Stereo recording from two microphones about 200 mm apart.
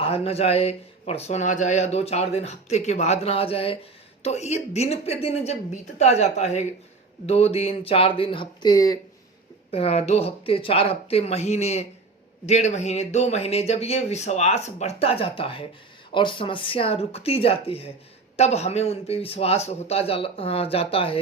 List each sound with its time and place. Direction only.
0.0 s a man's voice: 30° left (ahead or behind)
9.7 s a man's voice: 30° left (ahead or behind)